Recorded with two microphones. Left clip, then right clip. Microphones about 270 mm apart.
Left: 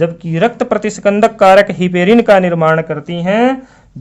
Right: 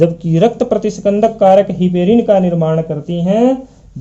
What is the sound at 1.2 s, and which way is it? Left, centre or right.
Speech, left.